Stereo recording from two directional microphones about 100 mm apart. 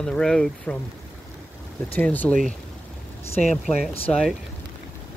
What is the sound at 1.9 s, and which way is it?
Speech, 15° left (ahead or behind).